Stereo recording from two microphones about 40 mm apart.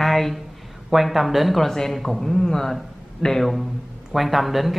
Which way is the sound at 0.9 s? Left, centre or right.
Centre.